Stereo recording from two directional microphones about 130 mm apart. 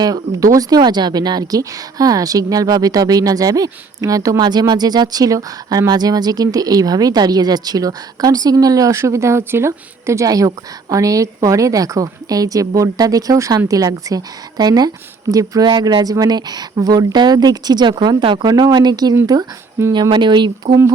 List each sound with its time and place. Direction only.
0.0 s speech: 30° right (ahead or behind)